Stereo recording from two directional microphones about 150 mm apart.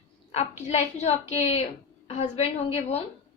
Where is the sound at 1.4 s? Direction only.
40° left (ahead or behind).